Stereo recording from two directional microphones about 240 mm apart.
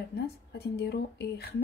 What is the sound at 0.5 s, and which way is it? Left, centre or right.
Speech, left.